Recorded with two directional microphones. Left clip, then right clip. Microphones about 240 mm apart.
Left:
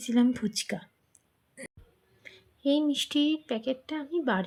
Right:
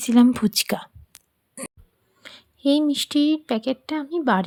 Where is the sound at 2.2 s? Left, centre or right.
Right.